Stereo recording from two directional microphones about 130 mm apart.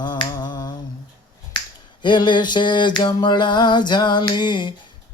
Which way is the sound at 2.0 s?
35° left (ahead or behind).